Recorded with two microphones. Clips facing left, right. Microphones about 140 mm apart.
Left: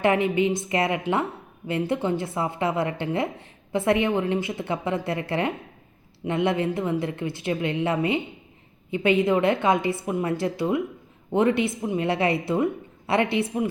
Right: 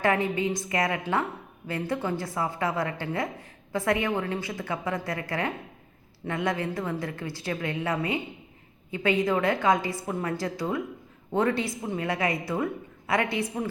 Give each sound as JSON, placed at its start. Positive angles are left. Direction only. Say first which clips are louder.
{"t": 0.0, "sound": "a woman's voice", "louder": "left 4 dB", "side_deg": 20}
{"t": 12.0, "sound": "a woman's voice", "louder": "left 4 dB", "side_deg": 25}